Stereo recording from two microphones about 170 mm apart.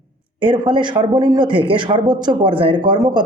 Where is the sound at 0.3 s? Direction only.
30° right (ahead or behind).